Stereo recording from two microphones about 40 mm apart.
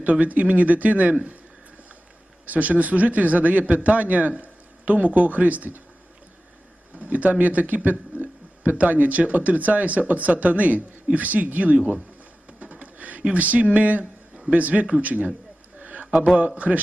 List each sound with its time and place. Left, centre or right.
0.0 s speech: right
2.5 s speech: right
6.9 s a man's voice: right
12.5 s a sound: right
13.3 s speech: right
15.8 s a sound: right
16.6 s speech: right